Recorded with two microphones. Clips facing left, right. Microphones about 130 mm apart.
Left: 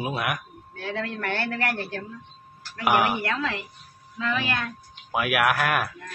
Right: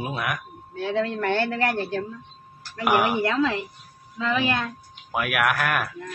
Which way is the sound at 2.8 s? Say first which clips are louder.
Right 1 dB; centre (ahead or behind).